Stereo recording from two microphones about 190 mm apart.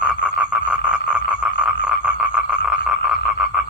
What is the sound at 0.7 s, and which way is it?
Frog, 5° right (ahead or behind).